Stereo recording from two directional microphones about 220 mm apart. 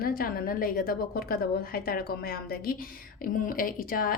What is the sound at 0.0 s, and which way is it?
A woman's voice, 40° left (ahead or behind).